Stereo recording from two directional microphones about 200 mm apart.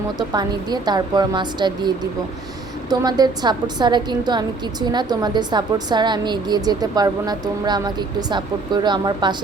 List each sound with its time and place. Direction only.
0.2 s a woman's voice: 20° right (ahead or behind)
2.9 s a woman's voice: 20° right (ahead or behind)